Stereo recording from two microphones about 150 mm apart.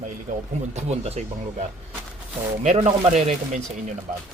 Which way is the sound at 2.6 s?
50° right (ahead or behind).